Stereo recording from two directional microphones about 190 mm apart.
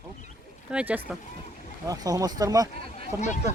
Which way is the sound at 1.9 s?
20° right (ahead or behind).